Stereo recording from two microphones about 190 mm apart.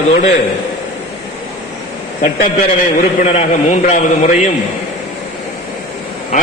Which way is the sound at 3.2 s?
35° left (ahead or behind).